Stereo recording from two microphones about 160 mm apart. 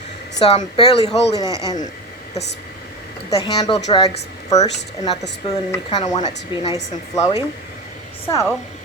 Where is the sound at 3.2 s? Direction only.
25° left (ahead or behind).